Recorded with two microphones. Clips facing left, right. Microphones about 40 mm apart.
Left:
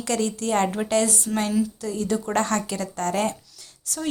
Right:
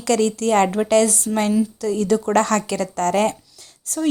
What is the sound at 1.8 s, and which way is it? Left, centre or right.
A woman's voice, right.